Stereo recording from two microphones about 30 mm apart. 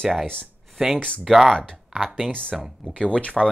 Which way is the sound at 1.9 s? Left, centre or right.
Centre.